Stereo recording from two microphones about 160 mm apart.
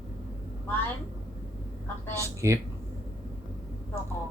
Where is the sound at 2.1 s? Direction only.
20° right (ahead or behind).